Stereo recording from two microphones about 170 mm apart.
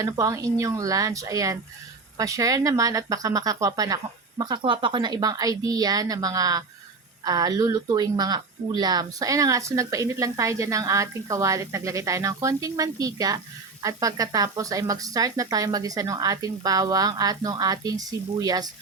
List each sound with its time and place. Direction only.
0.0 s speech: 20° right (ahead or behind)